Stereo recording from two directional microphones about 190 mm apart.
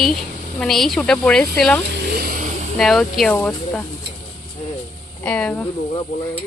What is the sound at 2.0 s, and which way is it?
Vehicle, 50° right (ahead or behind).